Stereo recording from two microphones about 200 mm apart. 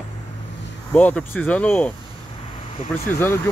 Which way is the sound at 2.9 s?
10° left (ahead or behind).